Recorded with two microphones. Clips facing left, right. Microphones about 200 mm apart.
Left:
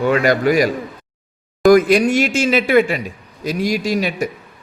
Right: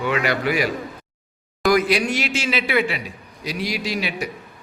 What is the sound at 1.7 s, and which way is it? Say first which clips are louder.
A man's voice: left 7 dB; 45° left (ahead or behind).